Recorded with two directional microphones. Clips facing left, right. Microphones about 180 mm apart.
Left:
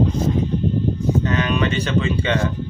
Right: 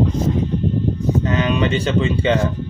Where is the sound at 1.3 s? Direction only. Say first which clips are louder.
Right 2 dB; 30° right (ahead or behind).